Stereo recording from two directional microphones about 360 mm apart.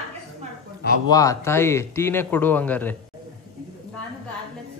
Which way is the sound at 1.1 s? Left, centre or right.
Centre.